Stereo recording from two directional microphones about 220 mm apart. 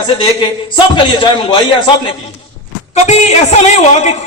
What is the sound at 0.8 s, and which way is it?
Speech, 20° left (ahead or behind).